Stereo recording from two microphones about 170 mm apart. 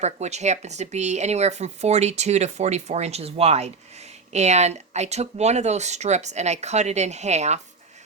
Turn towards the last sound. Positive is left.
turn(degrees=-40)  # may be behind; listen again after turning